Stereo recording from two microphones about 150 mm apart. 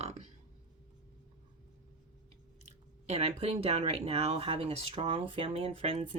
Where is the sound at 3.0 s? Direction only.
45° right (ahead or behind).